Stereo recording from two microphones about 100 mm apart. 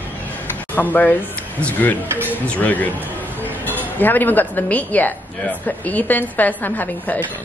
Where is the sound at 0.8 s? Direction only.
15° left (ahead or behind).